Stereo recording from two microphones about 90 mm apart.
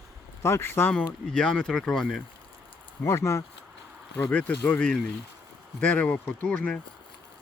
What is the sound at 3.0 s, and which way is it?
Speech, 35° left (ahead or behind).